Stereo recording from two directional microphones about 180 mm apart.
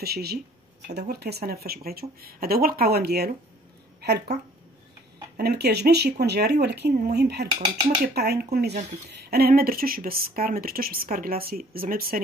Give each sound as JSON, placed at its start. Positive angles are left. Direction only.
{"t": 0.0, "sound": "speech", "side_deg": -60}
{"t": 5.4, "sound": "speech", "side_deg": -65}